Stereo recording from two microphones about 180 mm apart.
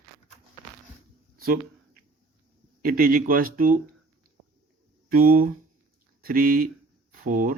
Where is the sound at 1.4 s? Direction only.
55° right (ahead or behind).